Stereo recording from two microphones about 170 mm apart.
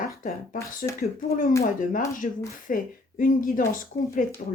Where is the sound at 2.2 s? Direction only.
45° left (ahead or behind).